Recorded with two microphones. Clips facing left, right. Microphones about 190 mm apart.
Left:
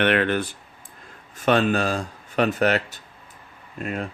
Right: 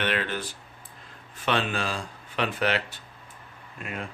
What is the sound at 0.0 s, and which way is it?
Speech, 60° left (ahead or behind).